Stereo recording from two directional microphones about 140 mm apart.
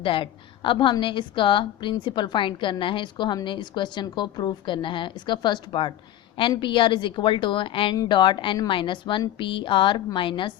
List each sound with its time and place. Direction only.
0.0 s a woman's voice: 40° left (ahead or behind)